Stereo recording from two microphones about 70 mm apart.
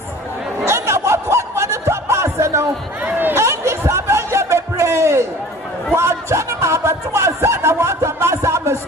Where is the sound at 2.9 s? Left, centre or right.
Right.